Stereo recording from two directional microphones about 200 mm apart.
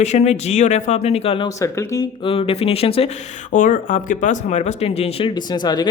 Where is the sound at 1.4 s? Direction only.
15° left (ahead or behind).